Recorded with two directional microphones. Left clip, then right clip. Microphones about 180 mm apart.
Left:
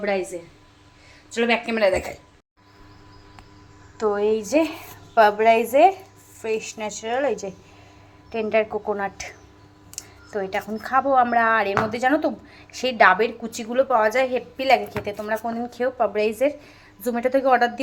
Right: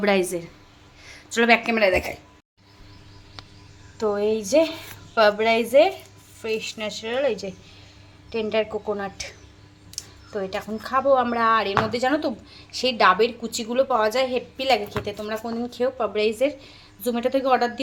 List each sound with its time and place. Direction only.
0.0 s a woman's voice: 40° right (ahead or behind)
1.3 s a woman's voice: 20° right (ahead or behind)
1.6 s a woman's voice: 5° right (ahead or behind)
3.9 s a woman's voice: 15° left (ahead or behind)
10.3 s a woman's voice: 5° left (ahead or behind)